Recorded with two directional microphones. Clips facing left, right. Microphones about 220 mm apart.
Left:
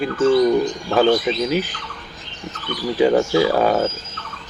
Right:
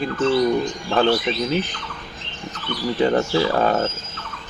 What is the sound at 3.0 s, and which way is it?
Speech, 10° left (ahead or behind).